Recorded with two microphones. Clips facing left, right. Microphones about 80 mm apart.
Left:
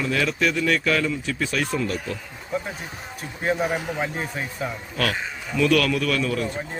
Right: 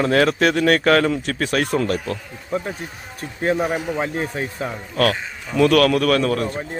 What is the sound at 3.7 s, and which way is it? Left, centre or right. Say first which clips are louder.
Speech: right 3 dB; centre.